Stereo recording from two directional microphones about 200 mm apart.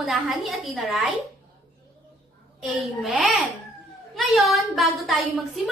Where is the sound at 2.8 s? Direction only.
Centre (ahead or behind).